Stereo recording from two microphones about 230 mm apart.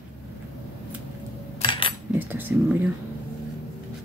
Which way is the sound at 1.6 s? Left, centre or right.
Left.